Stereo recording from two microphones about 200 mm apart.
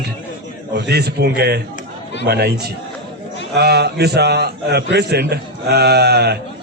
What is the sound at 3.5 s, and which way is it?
A man's voice, 55° right (ahead or behind).